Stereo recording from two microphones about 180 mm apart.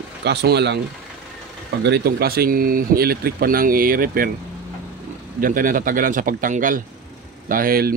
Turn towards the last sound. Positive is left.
turn(degrees=-55)  # may be behind; listen again after turning